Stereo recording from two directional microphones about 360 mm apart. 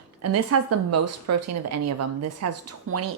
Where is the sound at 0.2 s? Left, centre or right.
Right.